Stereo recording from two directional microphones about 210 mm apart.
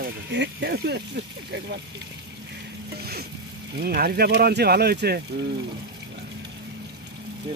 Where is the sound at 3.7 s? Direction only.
45° right (ahead or behind).